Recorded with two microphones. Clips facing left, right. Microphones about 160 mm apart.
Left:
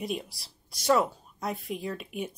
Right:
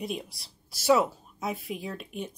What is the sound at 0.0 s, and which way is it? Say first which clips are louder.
Speech: left 1 dB; centre (ahead or behind).